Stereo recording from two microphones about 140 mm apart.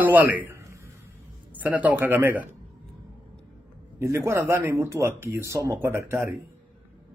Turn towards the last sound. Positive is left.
turn(degrees=-20)  # may be behind; listen again after turning